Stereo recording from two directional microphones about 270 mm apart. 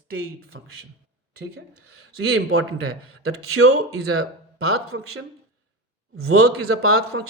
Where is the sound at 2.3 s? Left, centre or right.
Right.